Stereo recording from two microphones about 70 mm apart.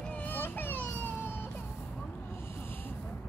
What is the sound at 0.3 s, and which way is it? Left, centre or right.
Children playing, left.